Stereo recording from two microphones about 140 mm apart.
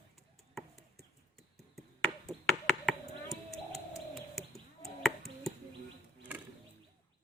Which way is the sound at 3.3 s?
25° left (ahead or behind).